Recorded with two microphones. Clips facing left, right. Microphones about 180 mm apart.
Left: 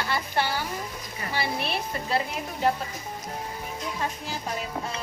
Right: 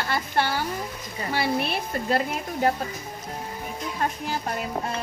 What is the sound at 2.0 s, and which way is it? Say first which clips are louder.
Dishes: right 4 dB; 50° right (ahead or behind).